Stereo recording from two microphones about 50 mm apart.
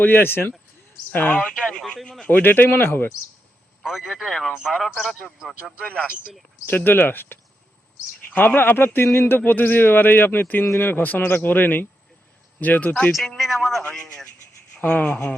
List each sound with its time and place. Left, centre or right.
0.0 s a man's voice: left
1.5 s speech: centre
2.2 s speech: left
3.8 s a man's voice: centre
4.7 s speech: centre
5.8 s speech: left
6.7 s speech: left
8.4 s speech: left
9.4 s a man's voice: left
13.1 s a man's voice: centre
14.8 s speech: left